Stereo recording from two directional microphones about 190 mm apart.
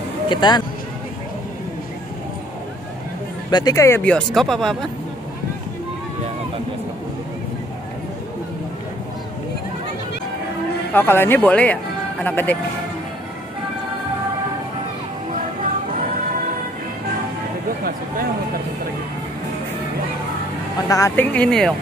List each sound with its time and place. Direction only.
0.3 s speech: 25° left (ahead or behind)
3.4 s speech: 20° left (ahead or behind); by 4.7 s centre (ahead or behind)
10.9 s speech: 10° left (ahead or behind)
20.9 s speech: 15° left (ahead or behind)